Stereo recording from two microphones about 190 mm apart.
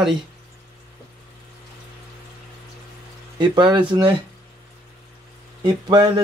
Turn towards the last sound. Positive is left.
turn(degrees=-20)  # may be behind; listen again after turning